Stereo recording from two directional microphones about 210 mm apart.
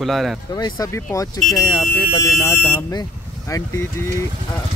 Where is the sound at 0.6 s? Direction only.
20° left (ahead or behind).